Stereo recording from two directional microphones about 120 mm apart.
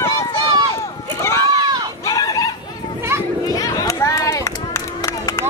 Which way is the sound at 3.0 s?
20° right (ahead or behind).